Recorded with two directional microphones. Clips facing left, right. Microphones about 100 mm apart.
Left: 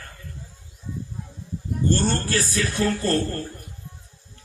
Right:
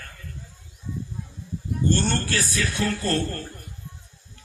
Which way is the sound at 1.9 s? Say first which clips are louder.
Left 2 dB; 35° left (ahead or behind).